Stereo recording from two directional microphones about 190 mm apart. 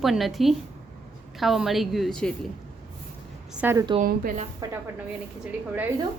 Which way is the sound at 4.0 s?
45° right (ahead or behind).